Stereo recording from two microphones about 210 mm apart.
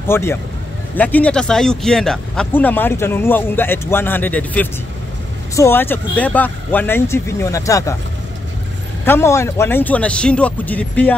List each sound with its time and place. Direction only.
0.0 s speech: 10° left (ahead or behind)
9.0 s speech: 10° left (ahead or behind)